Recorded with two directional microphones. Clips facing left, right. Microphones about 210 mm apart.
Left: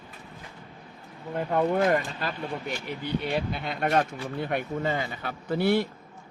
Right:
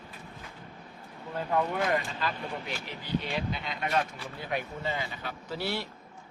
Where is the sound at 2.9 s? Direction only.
55° left (ahead or behind).